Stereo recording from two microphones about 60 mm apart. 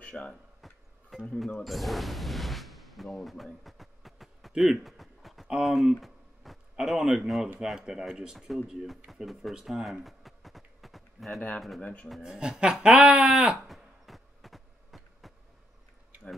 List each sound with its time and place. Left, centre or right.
0.1 s speech: centre
0.6 s music: centre
1.6 s speech: centre
3.6 s a sound: centre
5.6 s speech: centre
9.7 s a sound: centre
11.8 s speech: left
12.2 s speech: centre
13.6 s a sound: centre